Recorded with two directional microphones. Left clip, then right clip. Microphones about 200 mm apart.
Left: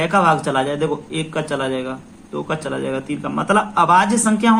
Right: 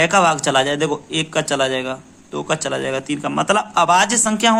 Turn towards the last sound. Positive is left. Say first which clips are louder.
# right 1 dB
turn(degrees=-45)  # may be behind; listen again after turning